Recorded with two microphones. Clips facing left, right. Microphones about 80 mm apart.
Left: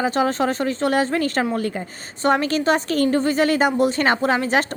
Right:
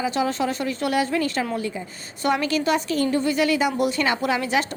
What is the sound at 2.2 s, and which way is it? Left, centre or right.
A woman's voice, left.